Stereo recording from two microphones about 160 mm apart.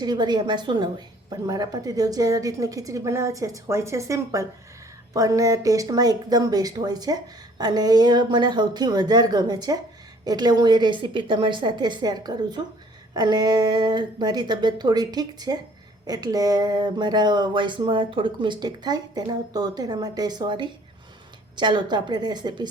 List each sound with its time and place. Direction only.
0.0 s speech: 25° right (ahead or behind)